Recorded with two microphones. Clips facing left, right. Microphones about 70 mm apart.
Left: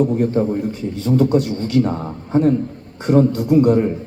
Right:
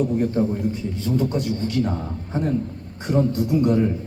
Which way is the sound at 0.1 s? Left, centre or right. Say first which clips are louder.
Left 4 dB; left.